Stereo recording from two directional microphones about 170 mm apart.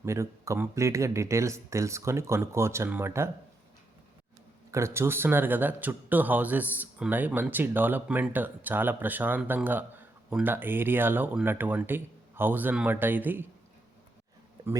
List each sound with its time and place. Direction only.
0.0 s speech: 15° right (ahead or behind)
4.7 s speech: 15° right (ahead or behind)